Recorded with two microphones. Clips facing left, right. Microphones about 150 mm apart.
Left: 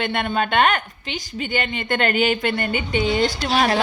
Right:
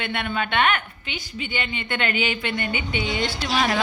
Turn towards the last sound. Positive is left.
turn(degrees=50)  # may be behind; listen again after turning